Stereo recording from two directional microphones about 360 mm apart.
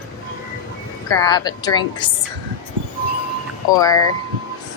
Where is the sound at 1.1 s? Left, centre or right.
Centre.